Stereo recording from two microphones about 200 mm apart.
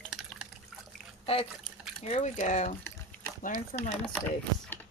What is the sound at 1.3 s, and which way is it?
Speech, 30° left (ahead or behind).